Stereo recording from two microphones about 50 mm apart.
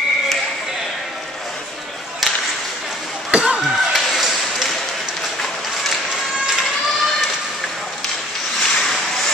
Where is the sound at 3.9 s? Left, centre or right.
Centre.